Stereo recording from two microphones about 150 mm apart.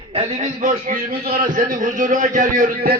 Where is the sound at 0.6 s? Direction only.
60° right (ahead or behind).